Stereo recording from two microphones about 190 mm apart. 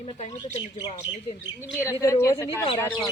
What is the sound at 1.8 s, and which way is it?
A woman's voice, 15° left (ahead or behind).